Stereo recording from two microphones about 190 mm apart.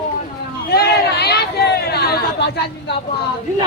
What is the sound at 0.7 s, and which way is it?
Speech, 60° left (ahead or behind).